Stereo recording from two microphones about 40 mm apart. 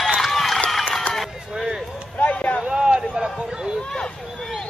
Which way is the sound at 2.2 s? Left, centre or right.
Left.